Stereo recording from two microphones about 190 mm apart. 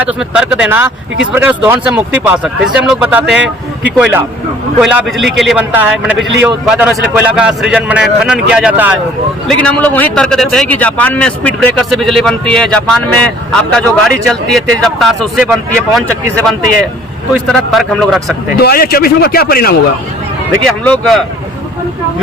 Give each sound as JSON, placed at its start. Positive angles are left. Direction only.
{"t": 0.0, "sound": "a man's voice", "side_deg": -5}
{"t": 9.6, "sound": "a man's voice", "side_deg": 5}
{"t": 18.6, "sound": "a man's voice", "side_deg": 55}
{"t": 20.8, "sound": "a man's voice", "side_deg": 0}